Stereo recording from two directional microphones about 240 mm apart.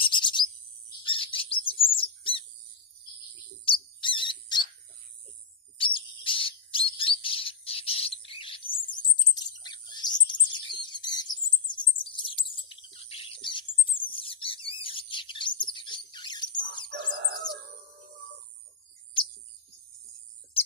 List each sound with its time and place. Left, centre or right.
0.0 s bird vocalization: centre
1.0 s bird: left
3.7 s bird: centre
5.7 s whistle: left
9.1 s a sound: centre
9.6 s bird: centre